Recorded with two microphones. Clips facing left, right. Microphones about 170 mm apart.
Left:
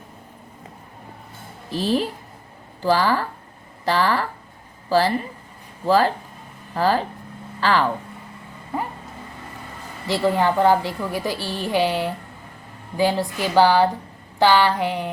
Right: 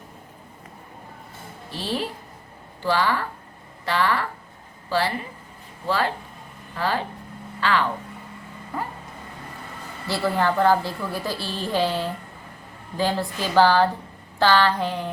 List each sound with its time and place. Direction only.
1.7 s speech: 40° left (ahead or behind)
8.7 s vehicle: 25° left (ahead or behind)
10.1 s a woman's voice: 15° left (ahead or behind)